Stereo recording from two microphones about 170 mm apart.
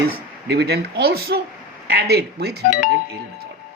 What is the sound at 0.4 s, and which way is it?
Speech, 75° right (ahead or behind).